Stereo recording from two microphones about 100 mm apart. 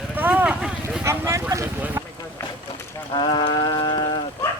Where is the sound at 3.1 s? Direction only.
50° left (ahead or behind).